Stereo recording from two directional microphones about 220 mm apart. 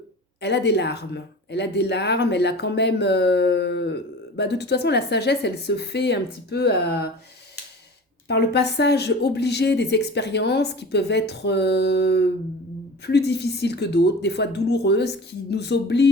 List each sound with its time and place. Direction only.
0.4 s a woman's voice: 50° left (ahead or behind)
8.3 s a woman's voice: 50° left (ahead or behind)